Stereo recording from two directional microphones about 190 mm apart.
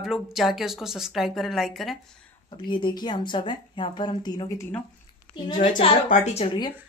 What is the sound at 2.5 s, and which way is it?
A woman's voice, 25° left (ahead or behind).